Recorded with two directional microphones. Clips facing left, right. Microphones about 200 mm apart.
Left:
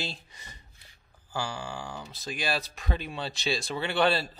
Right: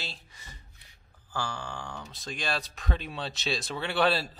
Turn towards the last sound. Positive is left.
turn(degrees=0)  # may be behind; listen again after turning